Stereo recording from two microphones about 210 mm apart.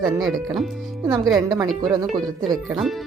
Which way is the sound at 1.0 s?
15° right (ahead or behind).